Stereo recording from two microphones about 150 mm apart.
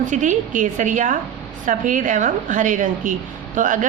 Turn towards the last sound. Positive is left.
turn(degrees=-60)  # may be behind; listen again after turning